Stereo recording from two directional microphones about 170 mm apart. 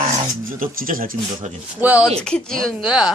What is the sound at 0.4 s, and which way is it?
Speech, 55° right (ahead or behind).